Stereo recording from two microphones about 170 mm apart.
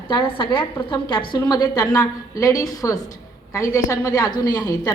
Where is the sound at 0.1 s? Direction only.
30° left (ahead or behind).